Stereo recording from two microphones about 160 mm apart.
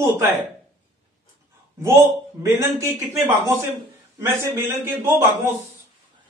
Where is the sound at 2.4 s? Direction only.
15° right (ahead or behind).